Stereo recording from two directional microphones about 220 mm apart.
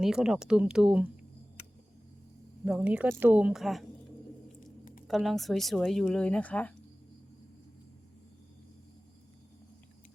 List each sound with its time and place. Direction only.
0.0 s speech: 5° right (ahead or behind)
2.6 s speech: 5° right (ahead or behind)
4.6 s a sound: 40° left (ahead or behind)
5.0 s speech: centre (ahead or behind)